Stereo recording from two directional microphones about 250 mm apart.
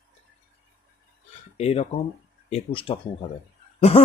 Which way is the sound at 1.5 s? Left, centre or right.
Left.